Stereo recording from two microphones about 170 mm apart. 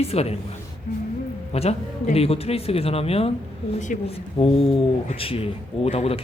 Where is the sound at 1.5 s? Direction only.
35° left (ahead or behind).